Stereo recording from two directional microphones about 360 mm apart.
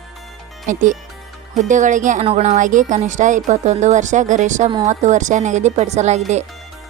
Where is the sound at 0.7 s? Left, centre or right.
Right.